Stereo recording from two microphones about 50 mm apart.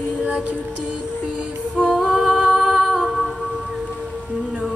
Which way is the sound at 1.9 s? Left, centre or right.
Centre.